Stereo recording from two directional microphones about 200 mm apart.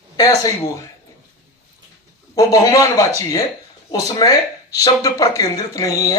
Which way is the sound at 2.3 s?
15° left (ahead or behind).